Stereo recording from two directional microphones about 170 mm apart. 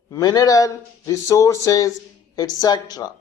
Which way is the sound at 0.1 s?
20° left (ahead or behind).